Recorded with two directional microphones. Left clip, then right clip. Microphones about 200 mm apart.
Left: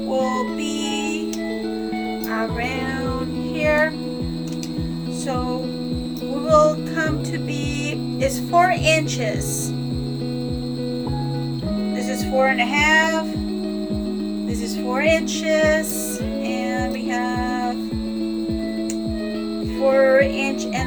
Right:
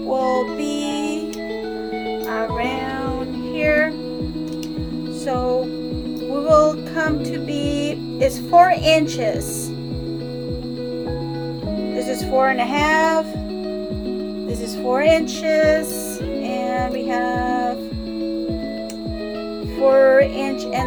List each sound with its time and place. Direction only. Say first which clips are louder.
2.3 s music: right 2 dB; 15° right (ahead or behind)
6.5 s music: right 1 dB; 20° right (ahead or behind)
8.2 s a woman's voice: right 4 dB; 25° right (ahead or behind)
11.9 s music: right 2 dB; 30° right (ahead or behind)
14.9 s music: right 3 dB; 30° right (ahead or behind)
20.0 s music: right 1 dB; 25° right (ahead or behind)